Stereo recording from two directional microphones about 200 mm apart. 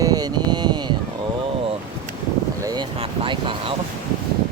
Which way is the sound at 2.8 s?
25° right (ahead or behind).